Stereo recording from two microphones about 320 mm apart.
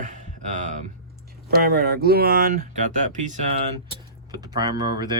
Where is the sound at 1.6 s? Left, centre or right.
Right.